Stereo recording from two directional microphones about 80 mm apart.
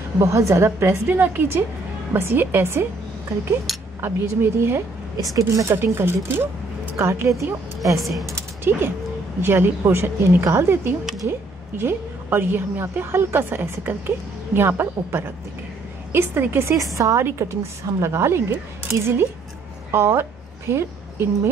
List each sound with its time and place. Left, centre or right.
0.2 s a woman's voice: right
3.7 s a sound: centre
4.0 s a woman's voice: right
5.1 s a woman's voice: right
5.8 s a woman's voice: right
8.0 s speech: centre
8.6 s a woman's voice: right